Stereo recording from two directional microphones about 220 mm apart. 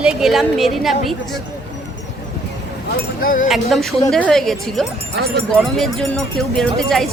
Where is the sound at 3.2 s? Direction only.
40° left (ahead or behind).